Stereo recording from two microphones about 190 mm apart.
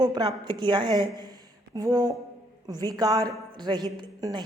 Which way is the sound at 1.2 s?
20° right (ahead or behind).